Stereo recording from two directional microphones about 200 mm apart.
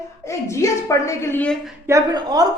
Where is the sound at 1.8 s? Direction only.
20° right (ahead or behind).